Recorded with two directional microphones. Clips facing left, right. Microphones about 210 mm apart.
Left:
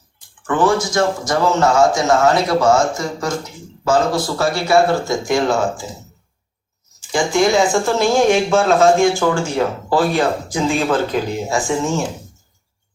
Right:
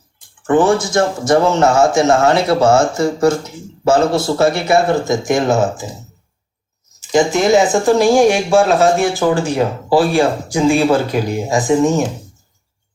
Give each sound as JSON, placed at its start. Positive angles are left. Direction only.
{"t": 0.4, "sound": "speech", "side_deg": -25}
{"t": 7.0, "sound": "speech", "side_deg": -20}